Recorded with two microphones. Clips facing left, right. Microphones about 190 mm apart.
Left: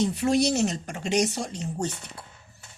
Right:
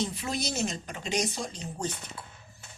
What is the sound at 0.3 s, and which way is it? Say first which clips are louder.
Speech: left 8 dB; 70° left (ahead or behind).